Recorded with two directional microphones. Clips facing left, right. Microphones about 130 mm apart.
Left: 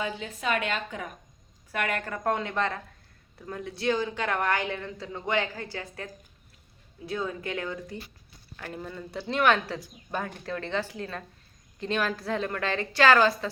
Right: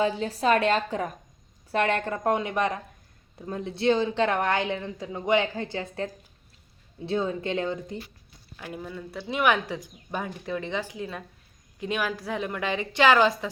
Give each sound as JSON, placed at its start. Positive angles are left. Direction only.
{"t": 0.0, "sound": "speech", "side_deg": -35}
{"t": 8.5, "sound": "speech", "side_deg": -10}